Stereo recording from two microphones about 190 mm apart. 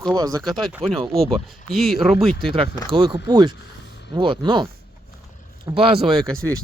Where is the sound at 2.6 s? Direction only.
25° right (ahead or behind).